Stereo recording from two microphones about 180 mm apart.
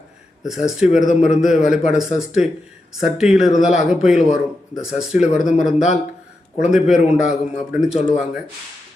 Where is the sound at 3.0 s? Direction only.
5° right (ahead or behind).